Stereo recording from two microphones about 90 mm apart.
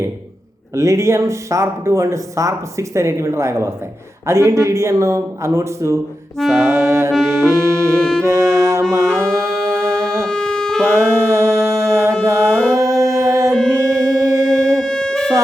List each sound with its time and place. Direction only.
0.7 s speech: 35° right (ahead or behind)
6.5 s saxophone: 30° right (ahead or behind)
7.3 s music: 30° right (ahead or behind)
10.2 s music: 10° left (ahead or behind)
10.8 s music: 30° right (ahead or behind)
13.5 s music: 10° left (ahead or behind)
13.9 s music: 35° right (ahead or behind)
14.8 s music: 10° left (ahead or behind)